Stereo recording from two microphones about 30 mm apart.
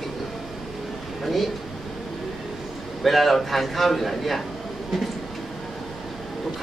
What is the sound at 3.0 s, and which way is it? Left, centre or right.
A man's voice, centre.